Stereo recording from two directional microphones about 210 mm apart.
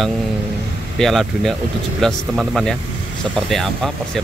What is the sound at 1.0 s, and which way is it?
Speech, centre (ahead or behind).